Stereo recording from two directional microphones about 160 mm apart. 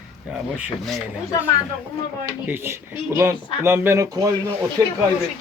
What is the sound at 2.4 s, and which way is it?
Speech, 15° right (ahead or behind).